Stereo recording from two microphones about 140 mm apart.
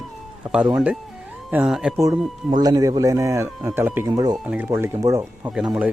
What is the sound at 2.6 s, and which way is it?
Speech, 25° right (ahead or behind).